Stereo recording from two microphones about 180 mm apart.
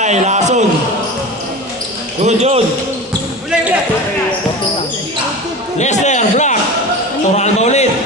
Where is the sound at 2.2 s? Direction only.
40° right (ahead or behind).